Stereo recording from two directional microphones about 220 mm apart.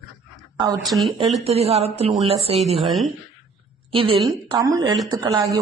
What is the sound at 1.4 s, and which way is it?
Speech, 30° right (ahead or behind).